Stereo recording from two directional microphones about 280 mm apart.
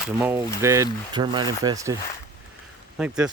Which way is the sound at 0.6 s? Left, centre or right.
Centre.